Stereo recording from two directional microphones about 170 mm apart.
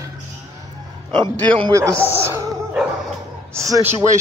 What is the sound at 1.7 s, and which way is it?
Speech, 15° right (ahead or behind).